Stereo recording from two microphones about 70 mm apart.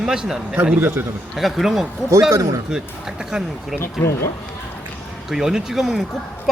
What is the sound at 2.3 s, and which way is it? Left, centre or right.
Speech, right.